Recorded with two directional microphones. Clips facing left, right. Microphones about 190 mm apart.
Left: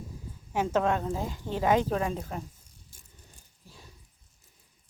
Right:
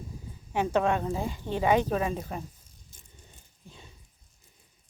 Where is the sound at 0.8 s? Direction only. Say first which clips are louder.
Right 1 dB; 10° right (ahead or behind).